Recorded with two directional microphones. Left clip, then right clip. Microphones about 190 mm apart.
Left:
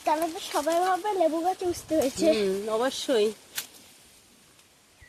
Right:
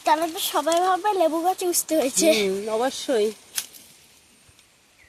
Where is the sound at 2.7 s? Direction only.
50° right (ahead or behind).